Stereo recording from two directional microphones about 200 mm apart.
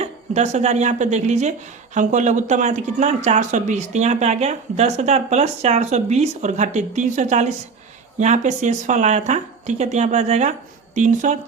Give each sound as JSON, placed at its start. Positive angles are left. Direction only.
{"t": 0.0, "sound": "speech", "side_deg": -35}